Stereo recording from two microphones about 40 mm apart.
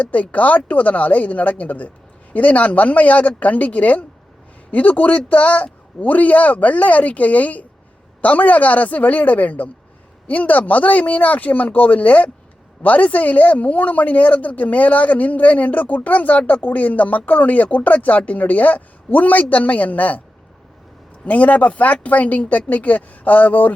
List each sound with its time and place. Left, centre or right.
0.0 s speech: left
21.2 s speech: left